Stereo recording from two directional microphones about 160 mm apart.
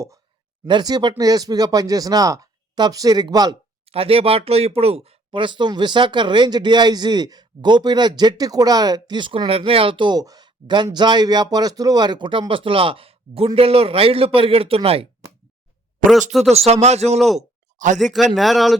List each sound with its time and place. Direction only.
0.7 s speech: 25° right (ahead or behind)
3.8 s a man's voice: 35° right (ahead or behind)
16.0 s speech: 60° right (ahead or behind)
16.5 s speech: 40° right (ahead or behind)
17.2 s speech: centre (ahead or behind)
17.7 s speech: 50° right (ahead or behind)
18.0 s speech: centre (ahead or behind)